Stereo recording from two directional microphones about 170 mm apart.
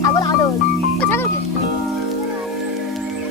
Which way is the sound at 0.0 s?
20° left (ahead or behind).